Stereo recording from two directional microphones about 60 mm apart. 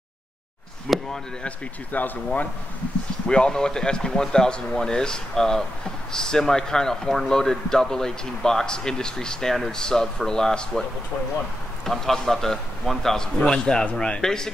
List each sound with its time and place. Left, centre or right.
0.8 s speech: centre
1.4 s speech: left
3.3 s speech: centre
11.9 s speech: centre